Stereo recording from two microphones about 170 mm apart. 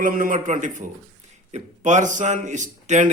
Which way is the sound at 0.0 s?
55° right (ahead or behind).